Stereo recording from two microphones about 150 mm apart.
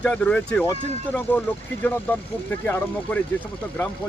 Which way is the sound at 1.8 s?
10° left (ahead or behind).